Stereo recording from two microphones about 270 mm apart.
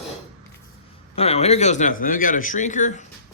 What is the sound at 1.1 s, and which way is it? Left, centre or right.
Speech, left.